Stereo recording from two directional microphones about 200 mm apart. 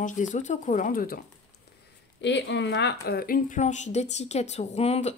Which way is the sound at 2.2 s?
60° left (ahead or behind).